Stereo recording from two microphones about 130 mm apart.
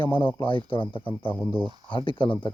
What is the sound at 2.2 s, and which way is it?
Speech, 40° left (ahead or behind).